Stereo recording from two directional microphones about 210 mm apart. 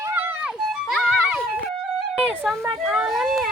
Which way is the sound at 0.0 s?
10° right (ahead or behind).